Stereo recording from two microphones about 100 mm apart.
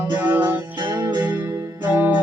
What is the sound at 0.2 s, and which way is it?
Music, 15° right (ahead or behind).